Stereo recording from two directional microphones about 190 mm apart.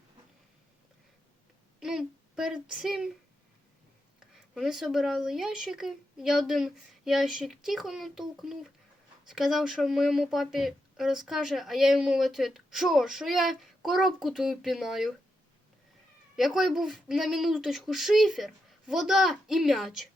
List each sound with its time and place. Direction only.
1.8 s a sound: centre (ahead or behind)
4.2 s speech: centre (ahead or behind)
16.3 s speech: centre (ahead or behind)